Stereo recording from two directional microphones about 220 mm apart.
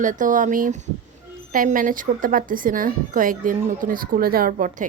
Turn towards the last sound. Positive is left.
turn(degrees=-35)  # may be behind; listen again after turning